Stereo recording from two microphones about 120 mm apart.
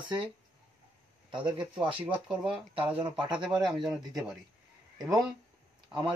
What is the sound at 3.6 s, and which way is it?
Speech, centre (ahead or behind).